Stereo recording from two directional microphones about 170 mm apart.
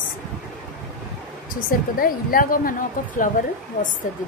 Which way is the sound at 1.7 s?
55° left (ahead or behind).